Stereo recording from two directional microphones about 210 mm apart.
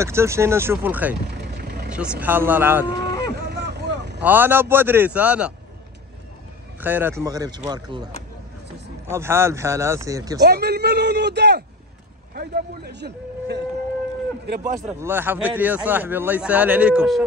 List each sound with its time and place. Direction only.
0.0 s a man's voice: 15° right (ahead or behind)
1.3 s vehicle: 50° right (ahead or behind)
1.9 s a man's voice: 5° right (ahead or behind)
3.3 s vehicle: 50° right (ahead or behind)
4.2 s a man's voice: 10° right (ahead or behind)
6.8 s a man's voice: 10° right (ahead or behind)
9.1 s a man's voice: 10° right (ahead or behind)
10.4 s a man's voice: 50° right (ahead or behind)
15.0 s a man's voice: 10° right (ahead or behind)